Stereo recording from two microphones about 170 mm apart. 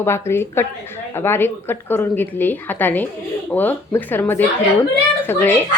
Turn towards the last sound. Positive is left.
turn(degrees=10)  # may be behind; listen again after turning